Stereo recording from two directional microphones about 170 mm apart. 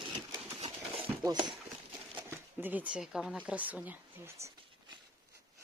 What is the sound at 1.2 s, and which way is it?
Speech, 25° right (ahead or behind).